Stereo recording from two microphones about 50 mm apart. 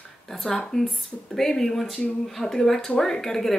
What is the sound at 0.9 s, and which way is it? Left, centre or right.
Speech, centre.